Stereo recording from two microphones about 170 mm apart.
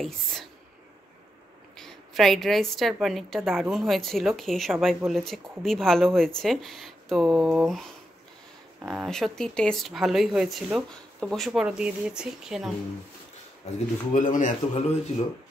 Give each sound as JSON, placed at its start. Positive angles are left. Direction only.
{"t": 0.0, "sound": "speech", "side_deg": 0}
{"t": 1.8, "sound": "a woman's voice", "side_deg": 0}
{"t": 8.8, "sound": "speech", "side_deg": 0}
{"t": 14.1, "sound": "speech", "side_deg": 50}